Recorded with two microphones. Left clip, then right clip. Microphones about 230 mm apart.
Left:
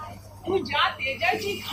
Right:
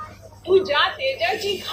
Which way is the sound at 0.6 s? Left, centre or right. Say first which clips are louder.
Right 4 dB; right.